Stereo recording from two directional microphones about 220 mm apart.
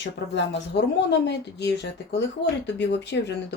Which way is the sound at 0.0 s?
55° left (ahead or behind).